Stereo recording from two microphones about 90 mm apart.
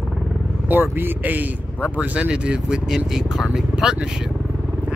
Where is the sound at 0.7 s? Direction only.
20° right (ahead or behind).